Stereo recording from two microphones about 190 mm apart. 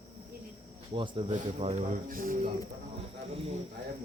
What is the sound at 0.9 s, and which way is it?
A man's voice, 25° right (ahead or behind).